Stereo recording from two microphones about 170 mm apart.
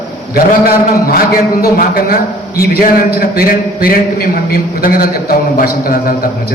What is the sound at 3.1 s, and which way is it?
A man's voice, 60° left (ahead or behind).